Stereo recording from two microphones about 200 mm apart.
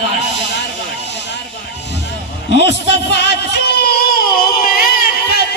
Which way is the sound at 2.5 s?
60° left (ahead or behind).